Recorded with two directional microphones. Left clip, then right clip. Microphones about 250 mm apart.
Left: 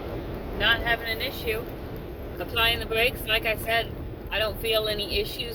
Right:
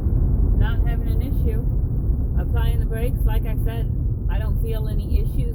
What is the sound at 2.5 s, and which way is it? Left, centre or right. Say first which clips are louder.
Speech: left 12 dB; centre.